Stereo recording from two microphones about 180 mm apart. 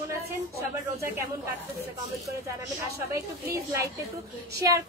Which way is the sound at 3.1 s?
15° right (ahead or behind).